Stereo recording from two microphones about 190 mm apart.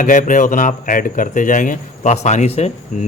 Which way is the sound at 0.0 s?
45° left (ahead or behind).